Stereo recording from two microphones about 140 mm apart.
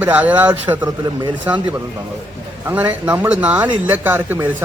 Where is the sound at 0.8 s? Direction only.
30° right (ahead or behind).